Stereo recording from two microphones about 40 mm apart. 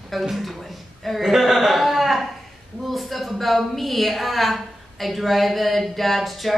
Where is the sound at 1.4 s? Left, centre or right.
Centre.